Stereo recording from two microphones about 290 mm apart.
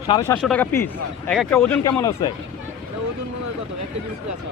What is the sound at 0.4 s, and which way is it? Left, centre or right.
Speech, centre.